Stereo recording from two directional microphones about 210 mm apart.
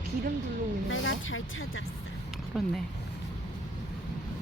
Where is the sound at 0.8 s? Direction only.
65° left (ahead or behind).